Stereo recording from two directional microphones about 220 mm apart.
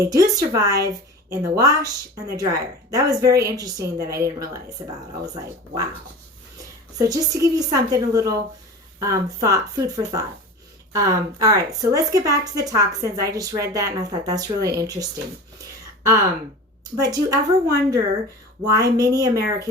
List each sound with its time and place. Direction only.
0.0 s a woman's voice: 15° right (ahead or behind)
7.1 s a woman's voice: 15° right (ahead or behind)
16.0 s a woman's voice: 15° right (ahead or behind)